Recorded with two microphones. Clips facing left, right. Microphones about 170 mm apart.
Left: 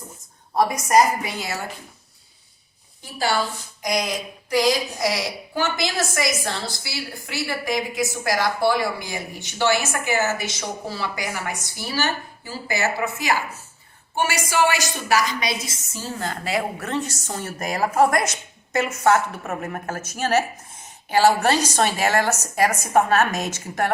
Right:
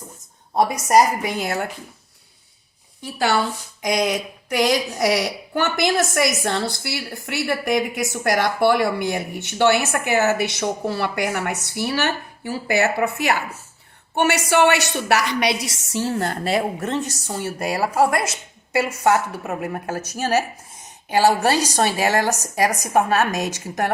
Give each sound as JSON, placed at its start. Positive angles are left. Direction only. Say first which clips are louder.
{"t": 1.2, "sound": "a woman's voice", "louder": "right 5 dB", "side_deg": -55}
{"t": 3.0, "sound": "a woman's voice", "louder": "right 3 dB", "side_deg": -65}
{"t": 16.4, "sound": "a woman's voice", "louder": "right 4 dB", "side_deg": -25}